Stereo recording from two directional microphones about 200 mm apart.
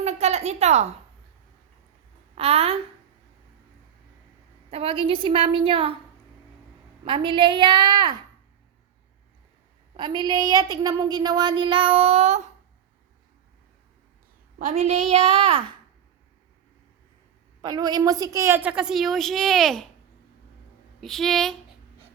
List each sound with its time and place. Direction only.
0.0 s a sound: 35° right (ahead or behind)
2.3 s a woman's voice: 30° right (ahead or behind)
4.7 s a woman's voice: 30° right (ahead or behind)
7.0 s a woman's voice: 25° right (ahead or behind)
10.0 s a woman's voice: 20° right (ahead or behind)
14.6 s a woman's voice: 35° right (ahead or behind)
17.6 s a woman's voice: 20° right (ahead or behind); by 19.9 s centre (ahead or behind)
21.0 s speech: centre (ahead or behind)